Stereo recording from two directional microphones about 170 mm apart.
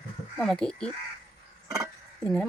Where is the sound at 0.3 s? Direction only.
5° left (ahead or behind).